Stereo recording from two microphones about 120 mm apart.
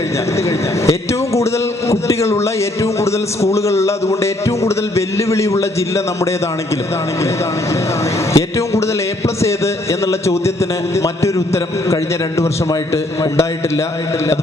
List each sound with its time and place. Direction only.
0.9 s a man's voice: 25° left (ahead or behind)
8.3 s a man's voice: 25° left (ahead or behind)